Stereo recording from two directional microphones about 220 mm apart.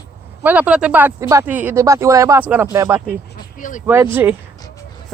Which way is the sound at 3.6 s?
35° left (ahead or behind).